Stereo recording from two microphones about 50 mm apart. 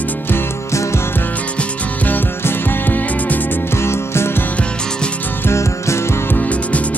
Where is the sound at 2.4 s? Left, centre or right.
Left.